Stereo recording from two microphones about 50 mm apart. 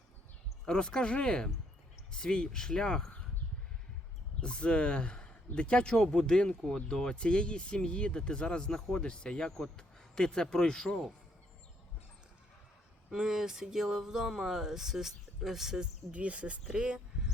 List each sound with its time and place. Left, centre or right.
0.6 s speech: centre
4.4 s speech: left
13.1 s speech: centre
16.1 s speech: right